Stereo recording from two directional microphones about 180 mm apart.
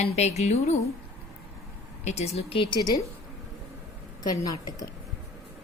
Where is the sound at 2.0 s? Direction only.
35° left (ahead or behind).